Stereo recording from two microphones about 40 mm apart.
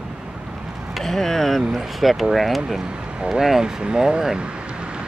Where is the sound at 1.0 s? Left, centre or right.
Centre.